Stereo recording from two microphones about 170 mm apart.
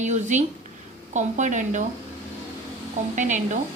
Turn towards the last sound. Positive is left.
turn(degrees=-45)  # may be behind; listen again after turning